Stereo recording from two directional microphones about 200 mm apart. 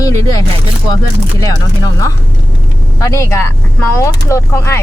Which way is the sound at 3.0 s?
15° left (ahead or behind).